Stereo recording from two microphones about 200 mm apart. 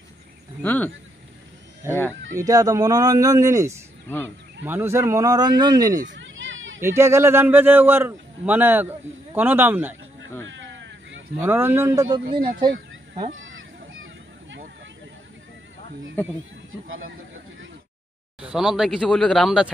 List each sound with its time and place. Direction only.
0.6 s speech: 10° left (ahead or behind)
1.8 s a man's voice: 10° right (ahead or behind)
6.0 s children playing: 70° right (ahead or behind)
6.8 s a man's voice: 15° right (ahead or behind)
10.4 s a sound: 65° right (ahead or behind)
11.4 s a man's voice: 10° right (ahead or behind)
13.3 s honk: 75° right (ahead or behind)
16.2 s speech: 10° left (ahead or behind)
16.8 s speech: 90° right
18.4 s speech: 5° right (ahead or behind)